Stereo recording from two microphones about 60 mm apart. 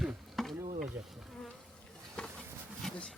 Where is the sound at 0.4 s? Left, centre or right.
Centre.